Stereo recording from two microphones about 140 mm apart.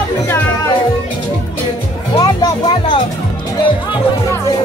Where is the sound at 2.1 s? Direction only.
25° left (ahead or behind).